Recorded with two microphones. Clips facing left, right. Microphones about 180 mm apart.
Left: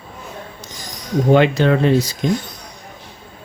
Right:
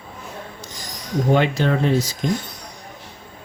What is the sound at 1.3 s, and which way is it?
Speech, 75° left (ahead or behind).